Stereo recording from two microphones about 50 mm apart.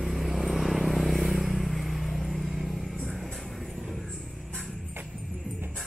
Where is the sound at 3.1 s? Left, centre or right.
Centre.